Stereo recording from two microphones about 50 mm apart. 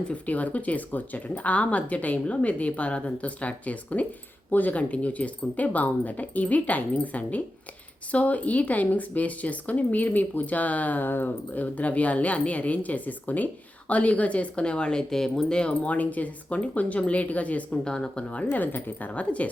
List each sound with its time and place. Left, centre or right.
0.1 s speech: left
15.9 s speech: left
17.7 s speech: centre
18.6 s speech: left